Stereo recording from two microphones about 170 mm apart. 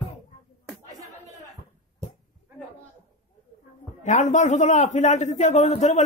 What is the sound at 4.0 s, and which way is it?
A man's voice, 45° left (ahead or behind).